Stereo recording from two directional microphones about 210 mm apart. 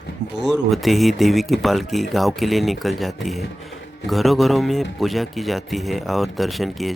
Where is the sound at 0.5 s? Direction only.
Centre (ahead or behind).